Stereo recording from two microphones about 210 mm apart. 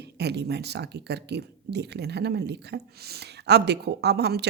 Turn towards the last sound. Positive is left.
turn(degrees=-50)  # may be behind; listen again after turning